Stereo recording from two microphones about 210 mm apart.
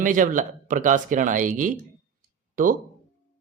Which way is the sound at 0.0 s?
40° right (ahead or behind).